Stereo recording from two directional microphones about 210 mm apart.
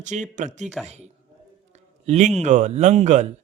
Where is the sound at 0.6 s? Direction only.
Centre (ahead or behind).